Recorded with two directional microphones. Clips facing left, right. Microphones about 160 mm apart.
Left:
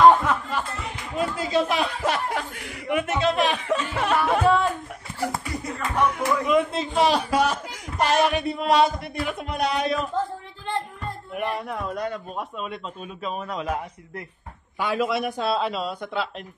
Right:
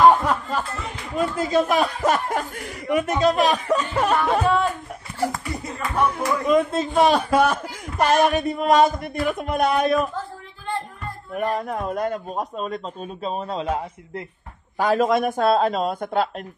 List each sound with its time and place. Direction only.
0.2 s speech: 35° right (ahead or behind)
4.2 s speech: centre (ahead or behind)
6.0 s a man's voice: 35° right (ahead or behind); by 10.0 s 50° right (ahead or behind)
11.3 s speech: 40° right (ahead or behind)
14.8 s a man's voice: 40° right (ahead or behind)